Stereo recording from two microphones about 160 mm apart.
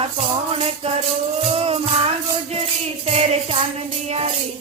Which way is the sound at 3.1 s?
40° right (ahead or behind).